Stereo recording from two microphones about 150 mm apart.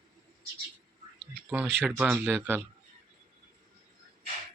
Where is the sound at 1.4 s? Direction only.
10° right (ahead or behind).